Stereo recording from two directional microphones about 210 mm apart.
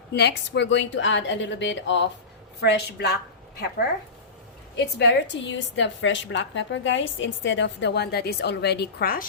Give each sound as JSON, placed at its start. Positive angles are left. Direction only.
{"t": 0.1, "sound": "a woman's voice", "side_deg": 55}
{"t": 4.9, "sound": "a woman's voice", "side_deg": 55}